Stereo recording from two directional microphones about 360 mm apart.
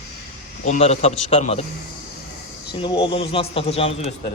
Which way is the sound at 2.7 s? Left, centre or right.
Centre.